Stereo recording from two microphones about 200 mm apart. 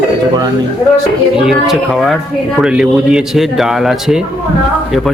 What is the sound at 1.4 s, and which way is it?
A man's voice, centre (ahead or behind).